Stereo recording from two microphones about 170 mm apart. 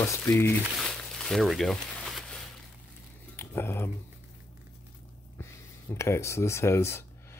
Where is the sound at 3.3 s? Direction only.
15° left (ahead or behind).